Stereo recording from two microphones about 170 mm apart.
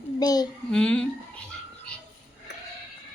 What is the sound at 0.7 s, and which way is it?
Speech, 5° left (ahead or behind).